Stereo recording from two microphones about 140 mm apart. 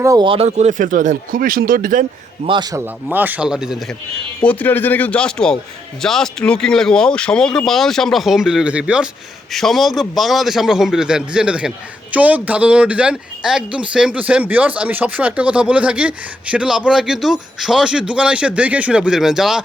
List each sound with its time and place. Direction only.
0.0 s speech: 25° right (ahead or behind)
0.3 s speech: 50° right (ahead or behind); by 2.0 s 80° right
2.5 s speech: 30° right (ahead or behind)
2.8 s speech: 15° right (ahead or behind)
4.4 s speech: 10° left (ahead or behind); by 19.6 s 5° right (ahead or behind)